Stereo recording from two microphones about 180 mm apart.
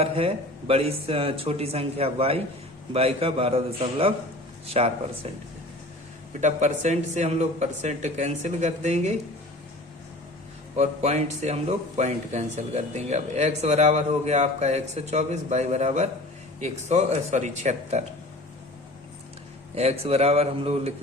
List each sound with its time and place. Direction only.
0.0 s speech: 35° right (ahead or behind)
6.4 s speech: 40° right (ahead or behind)
10.8 s speech: 40° right (ahead or behind)
19.7 s speech: 35° right (ahead or behind)